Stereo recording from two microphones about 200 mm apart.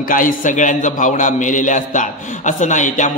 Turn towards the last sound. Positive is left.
turn(degrees=35)  # may be behind; listen again after turning